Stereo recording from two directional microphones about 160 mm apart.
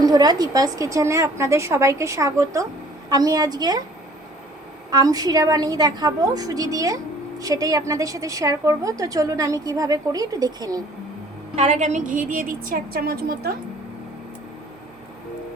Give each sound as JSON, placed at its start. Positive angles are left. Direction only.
{"t": 0.0, "sound": "a woman's voice", "side_deg": -25}
{"t": 4.9, "sound": "a woman's voice", "side_deg": -25}
{"t": 11.5, "sound": "a woman's voice", "side_deg": -45}